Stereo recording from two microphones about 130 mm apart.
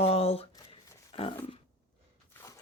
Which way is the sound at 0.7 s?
45° left (ahead or behind).